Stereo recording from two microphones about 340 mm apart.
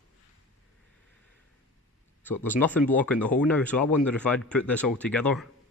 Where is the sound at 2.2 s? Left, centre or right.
Centre.